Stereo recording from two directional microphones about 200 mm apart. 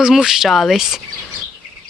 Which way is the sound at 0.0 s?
5° right (ahead or behind).